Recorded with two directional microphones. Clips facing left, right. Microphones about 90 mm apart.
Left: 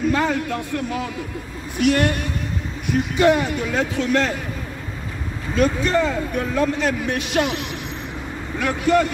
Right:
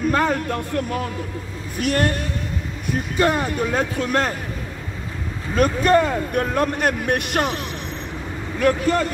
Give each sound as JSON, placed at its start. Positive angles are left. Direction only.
{"t": 0.1, "sound": "a man's voice", "side_deg": -50}
{"t": 5.6, "sound": "speech", "side_deg": -50}